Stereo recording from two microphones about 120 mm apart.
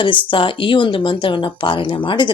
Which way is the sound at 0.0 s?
45° left (ahead or behind).